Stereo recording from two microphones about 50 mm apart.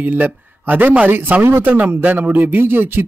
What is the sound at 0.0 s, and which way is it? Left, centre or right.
A man's voice, right.